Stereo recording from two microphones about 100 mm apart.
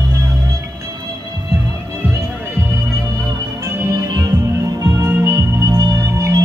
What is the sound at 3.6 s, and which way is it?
Music, 25° right (ahead or behind).